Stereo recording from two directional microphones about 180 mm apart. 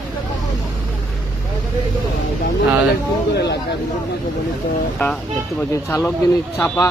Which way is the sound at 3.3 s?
70° left (ahead or behind).